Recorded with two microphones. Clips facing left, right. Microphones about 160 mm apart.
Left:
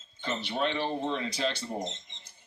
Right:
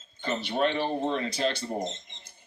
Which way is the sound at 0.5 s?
50° right (ahead or behind).